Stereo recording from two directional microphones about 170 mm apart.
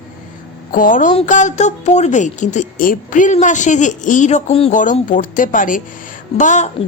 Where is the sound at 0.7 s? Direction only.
50° left (ahead or behind).